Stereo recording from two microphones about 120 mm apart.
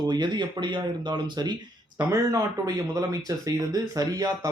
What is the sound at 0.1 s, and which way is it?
Speech, 40° right (ahead or behind).